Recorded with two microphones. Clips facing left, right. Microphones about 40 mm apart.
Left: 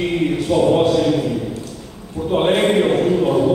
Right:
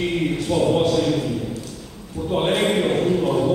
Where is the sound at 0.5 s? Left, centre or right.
Centre.